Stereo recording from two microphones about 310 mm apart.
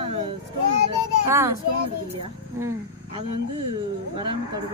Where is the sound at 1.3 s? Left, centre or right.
Centre.